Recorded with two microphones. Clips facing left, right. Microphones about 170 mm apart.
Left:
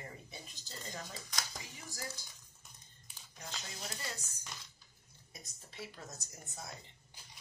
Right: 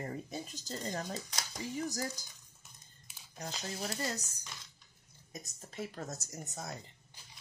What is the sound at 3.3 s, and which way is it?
Speech, 45° right (ahead or behind).